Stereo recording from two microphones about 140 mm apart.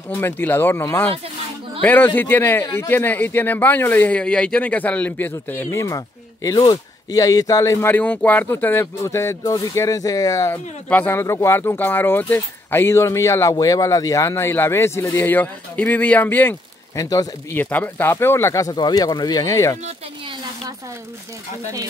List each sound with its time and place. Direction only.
0.1 s a man's voice: 15° left (ahead or behind)
10.5 s a man's voice: 15° left (ahead or behind)
17.6 s speech: 10° left (ahead or behind)